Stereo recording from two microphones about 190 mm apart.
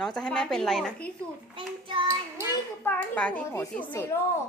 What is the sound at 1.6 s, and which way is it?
Child singing, 25° right (ahead or behind).